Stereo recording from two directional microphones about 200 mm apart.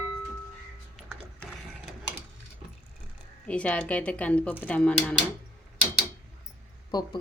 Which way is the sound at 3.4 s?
5° left (ahead or behind).